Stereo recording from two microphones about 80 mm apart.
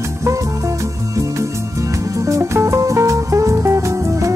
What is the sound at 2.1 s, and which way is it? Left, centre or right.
Music, right.